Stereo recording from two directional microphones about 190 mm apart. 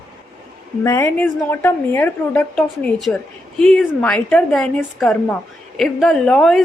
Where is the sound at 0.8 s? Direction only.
15° left (ahead or behind).